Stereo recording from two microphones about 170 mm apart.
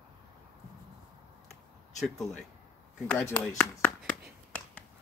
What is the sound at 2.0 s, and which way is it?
Speech, centre (ahead or behind).